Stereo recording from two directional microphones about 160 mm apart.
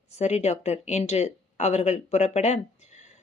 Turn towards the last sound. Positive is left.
turn(degrees=45)  # may be behind; listen again after turning